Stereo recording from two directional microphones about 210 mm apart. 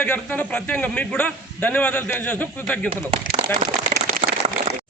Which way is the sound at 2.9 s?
25° right (ahead or behind).